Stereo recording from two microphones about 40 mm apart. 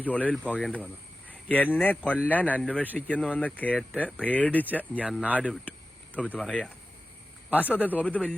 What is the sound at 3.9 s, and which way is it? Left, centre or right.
Speech, right.